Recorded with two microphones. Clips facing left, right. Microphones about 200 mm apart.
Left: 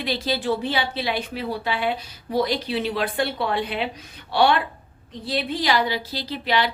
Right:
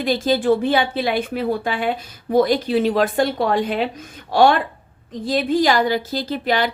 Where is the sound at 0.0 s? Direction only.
50° right (ahead or behind).